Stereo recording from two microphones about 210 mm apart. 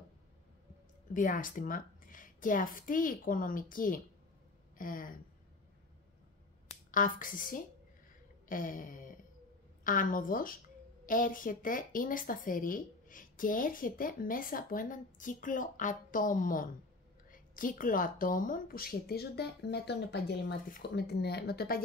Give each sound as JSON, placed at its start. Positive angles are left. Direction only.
{"t": 1.1, "sound": "speech", "side_deg": 40}
{"t": 6.9, "sound": "a woman's voice", "side_deg": 40}